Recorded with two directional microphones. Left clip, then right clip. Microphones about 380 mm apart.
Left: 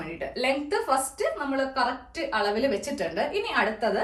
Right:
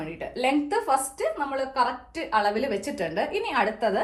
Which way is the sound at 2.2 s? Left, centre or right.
Right.